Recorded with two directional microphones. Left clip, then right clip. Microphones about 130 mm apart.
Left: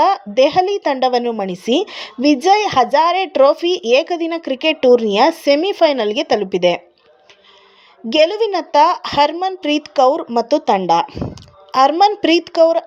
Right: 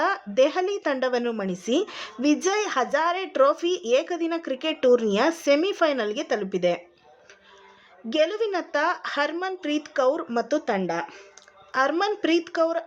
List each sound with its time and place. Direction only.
0.0 s a woman's voice: 20° left (ahead or behind)
8.1 s a woman's voice: 25° left (ahead or behind)